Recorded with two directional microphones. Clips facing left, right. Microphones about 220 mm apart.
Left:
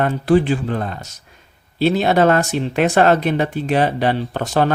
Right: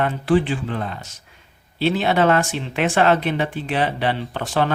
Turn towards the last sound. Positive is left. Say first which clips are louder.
# left 4 dB
turn(degrees=40)  # may be behind; listen again after turning